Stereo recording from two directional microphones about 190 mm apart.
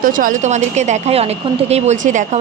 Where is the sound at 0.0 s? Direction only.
45° right (ahead or behind).